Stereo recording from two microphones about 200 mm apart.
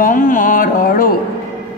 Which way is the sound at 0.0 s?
45° left (ahead or behind).